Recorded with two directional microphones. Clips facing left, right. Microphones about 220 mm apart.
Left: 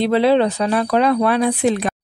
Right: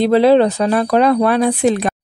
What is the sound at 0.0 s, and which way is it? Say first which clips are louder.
A woman's voice: right 4 dB; 40° right (ahead or behind).